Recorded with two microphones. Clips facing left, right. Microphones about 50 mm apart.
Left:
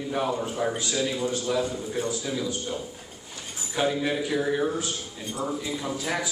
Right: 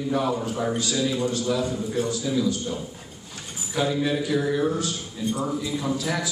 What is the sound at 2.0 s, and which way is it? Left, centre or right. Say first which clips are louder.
Speech: right 4 dB; left.